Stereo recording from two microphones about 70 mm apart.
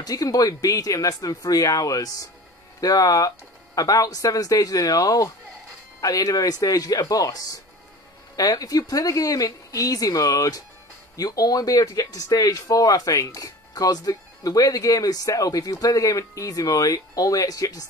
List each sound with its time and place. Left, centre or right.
0.0 s speech: left